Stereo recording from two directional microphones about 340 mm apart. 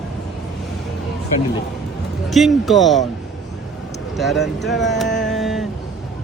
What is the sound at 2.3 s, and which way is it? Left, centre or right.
Speech, centre.